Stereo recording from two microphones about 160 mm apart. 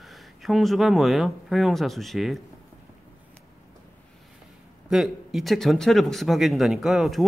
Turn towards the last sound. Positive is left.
turn(degrees=0)  # may be behind; listen again after turning